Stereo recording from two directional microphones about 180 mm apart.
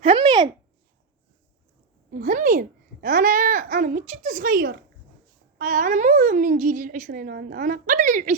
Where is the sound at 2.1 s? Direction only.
50° right (ahead or behind).